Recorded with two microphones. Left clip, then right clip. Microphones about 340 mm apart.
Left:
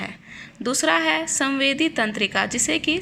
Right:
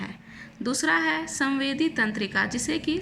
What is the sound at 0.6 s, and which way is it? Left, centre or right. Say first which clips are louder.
A woman's voice: left 4 dB; centre.